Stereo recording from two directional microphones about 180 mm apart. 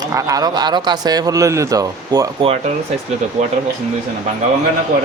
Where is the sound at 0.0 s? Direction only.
15° right (ahead or behind).